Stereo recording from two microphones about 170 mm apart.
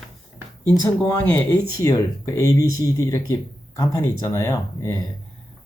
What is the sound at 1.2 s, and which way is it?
Speech, 15° left (ahead or behind).